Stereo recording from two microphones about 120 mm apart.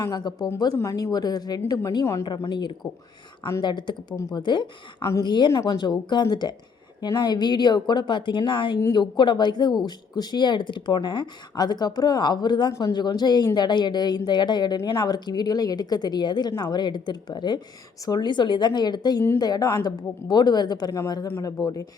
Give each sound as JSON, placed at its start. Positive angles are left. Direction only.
{"t": 0.0, "sound": "speech", "side_deg": 35}